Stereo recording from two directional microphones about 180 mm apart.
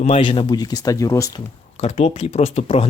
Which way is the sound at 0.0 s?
30° left (ahead or behind).